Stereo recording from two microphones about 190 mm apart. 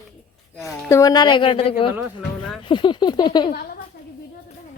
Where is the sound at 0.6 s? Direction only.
15° left (ahead or behind).